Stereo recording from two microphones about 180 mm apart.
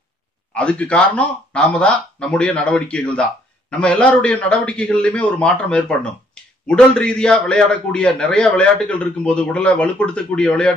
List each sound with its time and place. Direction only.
0.6 s a man's voice: 5° left (ahead or behind)